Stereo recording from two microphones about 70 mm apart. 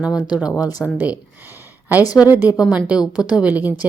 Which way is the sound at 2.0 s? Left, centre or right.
Left.